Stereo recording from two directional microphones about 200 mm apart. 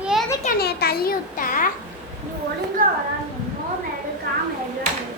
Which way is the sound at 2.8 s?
40° right (ahead or behind).